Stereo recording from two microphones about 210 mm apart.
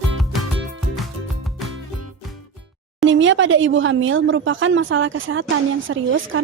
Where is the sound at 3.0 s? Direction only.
65° right (ahead or behind).